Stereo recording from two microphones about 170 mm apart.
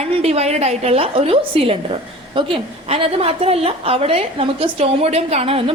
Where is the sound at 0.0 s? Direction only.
40° right (ahead or behind).